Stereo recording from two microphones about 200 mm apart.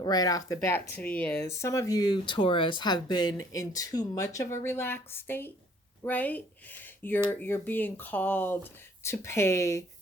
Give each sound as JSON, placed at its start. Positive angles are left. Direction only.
{"t": 0.0, "sound": "speech", "side_deg": 20}